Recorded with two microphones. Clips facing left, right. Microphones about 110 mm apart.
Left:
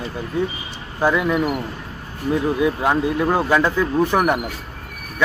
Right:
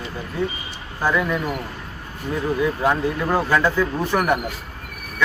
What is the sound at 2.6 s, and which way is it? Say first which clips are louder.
Speech: left 2 dB; 15° left (ahead or behind).